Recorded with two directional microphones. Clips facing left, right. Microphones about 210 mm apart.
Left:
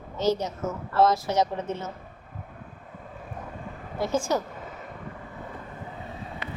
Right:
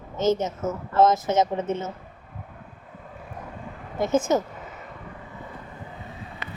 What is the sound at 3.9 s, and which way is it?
Speech, 20° right (ahead or behind).